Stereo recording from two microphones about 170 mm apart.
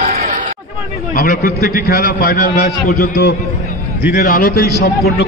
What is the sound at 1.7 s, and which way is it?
A man's voice, 60° left (ahead or behind).